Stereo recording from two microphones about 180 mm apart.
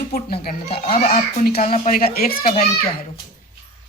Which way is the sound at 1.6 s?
45° left (ahead or behind).